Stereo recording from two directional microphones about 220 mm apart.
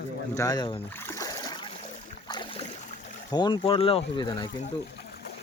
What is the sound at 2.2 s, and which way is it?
Boat, 20° left (ahead or behind).